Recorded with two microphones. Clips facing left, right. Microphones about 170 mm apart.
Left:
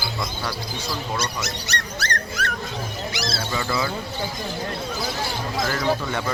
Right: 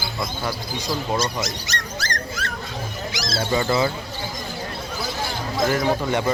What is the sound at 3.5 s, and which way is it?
Speech, 25° right (ahead or behind).